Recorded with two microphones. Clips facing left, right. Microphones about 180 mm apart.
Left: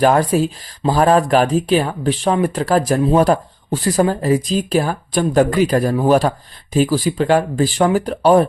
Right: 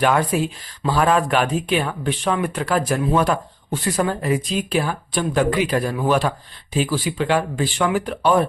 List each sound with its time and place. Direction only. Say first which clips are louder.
0.0 s speech: left 5 dB; 35° left (ahead or behind)